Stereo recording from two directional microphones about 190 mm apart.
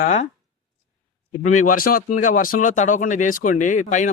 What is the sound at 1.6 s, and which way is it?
Speech, 50° left (ahead or behind).